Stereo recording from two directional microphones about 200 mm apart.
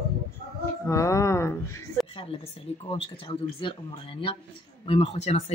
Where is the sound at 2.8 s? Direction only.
25° left (ahead or behind).